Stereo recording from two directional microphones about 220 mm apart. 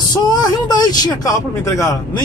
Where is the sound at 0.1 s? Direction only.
20° left (ahead or behind).